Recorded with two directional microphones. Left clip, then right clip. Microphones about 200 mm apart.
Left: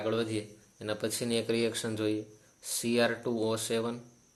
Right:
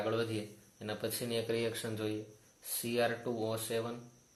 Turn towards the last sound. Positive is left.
turn(degrees=40)  # may be behind; listen again after turning